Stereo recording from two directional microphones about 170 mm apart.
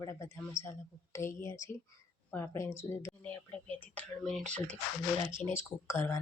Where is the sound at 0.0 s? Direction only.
15° left (ahead or behind).